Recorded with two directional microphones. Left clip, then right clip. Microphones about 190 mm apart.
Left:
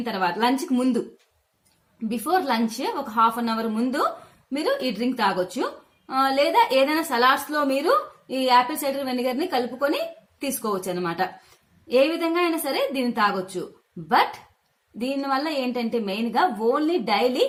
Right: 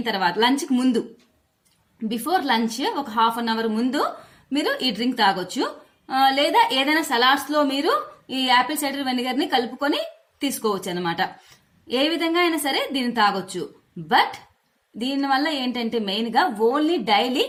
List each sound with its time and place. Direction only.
0.0 s a woman's voice: 40° right (ahead or behind)
2.2 s a woman's voice: 35° right (ahead or behind)
15.1 s a woman's voice: 40° right (ahead or behind)